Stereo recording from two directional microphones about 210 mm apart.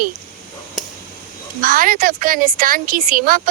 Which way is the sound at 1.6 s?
40° right (ahead or behind).